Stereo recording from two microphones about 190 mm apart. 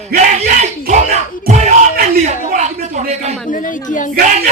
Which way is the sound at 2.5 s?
40° right (ahead or behind).